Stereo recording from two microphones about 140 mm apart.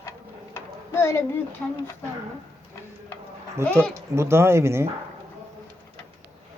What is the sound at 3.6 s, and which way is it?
Speech, 20° right (ahead or behind).